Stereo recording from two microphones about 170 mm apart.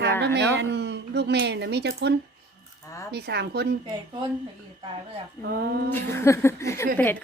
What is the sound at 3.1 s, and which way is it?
Speech, 75° right (ahead or behind).